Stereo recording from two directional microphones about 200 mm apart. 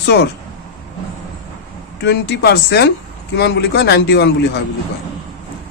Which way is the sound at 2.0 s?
55° left (ahead or behind).